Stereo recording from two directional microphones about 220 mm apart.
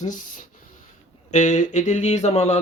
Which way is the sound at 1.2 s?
35° left (ahead or behind).